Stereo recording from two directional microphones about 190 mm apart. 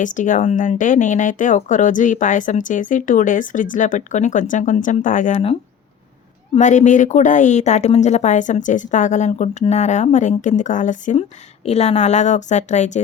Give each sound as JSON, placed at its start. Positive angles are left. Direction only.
{"t": 0.0, "sound": "a woman's voice", "side_deg": 40}